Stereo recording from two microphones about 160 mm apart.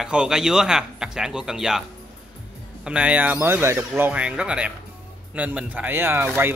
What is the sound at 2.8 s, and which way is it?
Speech, 5° right (ahead or behind).